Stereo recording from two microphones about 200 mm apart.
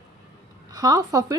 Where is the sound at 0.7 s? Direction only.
20° right (ahead or behind).